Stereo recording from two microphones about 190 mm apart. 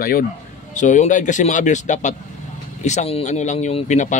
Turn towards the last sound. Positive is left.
turn(degrees=40)  # may be behind; listen again after turning